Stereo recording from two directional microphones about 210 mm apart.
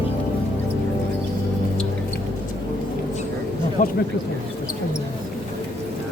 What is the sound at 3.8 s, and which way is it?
Speech, 35° left (ahead or behind).